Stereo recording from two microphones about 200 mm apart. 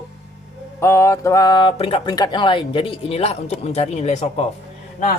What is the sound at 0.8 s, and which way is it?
Speech, 15° left (ahead or behind).